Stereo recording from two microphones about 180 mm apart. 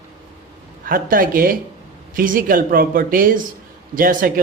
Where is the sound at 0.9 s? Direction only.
50° right (ahead or behind).